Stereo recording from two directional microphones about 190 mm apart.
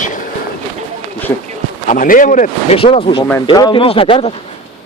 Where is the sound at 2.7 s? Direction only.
30° left (ahead or behind).